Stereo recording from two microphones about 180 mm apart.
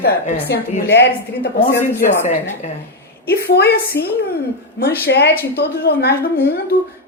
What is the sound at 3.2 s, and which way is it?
A woman's voice, 60° left (ahead or behind).